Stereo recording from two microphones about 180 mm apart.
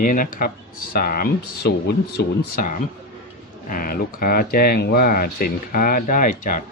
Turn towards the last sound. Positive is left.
turn(degrees=45)  # may be behind; listen again after turning